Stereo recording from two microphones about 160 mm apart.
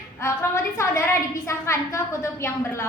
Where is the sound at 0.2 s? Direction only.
15° left (ahead or behind).